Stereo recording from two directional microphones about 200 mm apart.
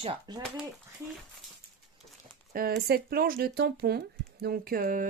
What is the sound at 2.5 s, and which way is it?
Speech, 50° right (ahead or behind).